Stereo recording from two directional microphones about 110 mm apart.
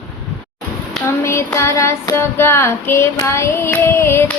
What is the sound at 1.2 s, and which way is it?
Child singing, 25° left (ahead or behind).